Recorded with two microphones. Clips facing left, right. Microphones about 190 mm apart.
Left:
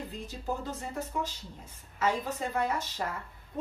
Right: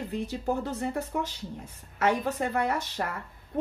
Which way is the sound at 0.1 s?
65° right (ahead or behind).